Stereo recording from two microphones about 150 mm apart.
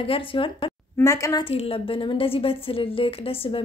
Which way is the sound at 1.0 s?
20° left (ahead or behind).